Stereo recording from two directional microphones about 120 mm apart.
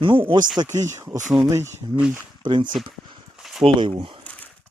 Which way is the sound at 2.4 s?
40° right (ahead or behind).